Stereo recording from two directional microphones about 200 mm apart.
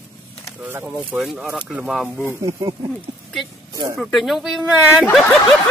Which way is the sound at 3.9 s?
Centre (ahead or behind).